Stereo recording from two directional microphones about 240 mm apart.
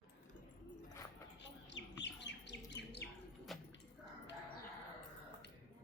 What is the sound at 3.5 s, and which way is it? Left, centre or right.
Keys jangling, centre.